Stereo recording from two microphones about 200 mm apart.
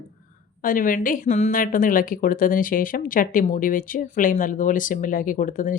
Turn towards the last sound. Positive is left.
turn(degrees=40)  # may be behind; listen again after turning